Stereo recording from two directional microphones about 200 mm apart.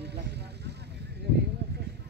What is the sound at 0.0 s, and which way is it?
Vehicle, 55° right (ahead or behind).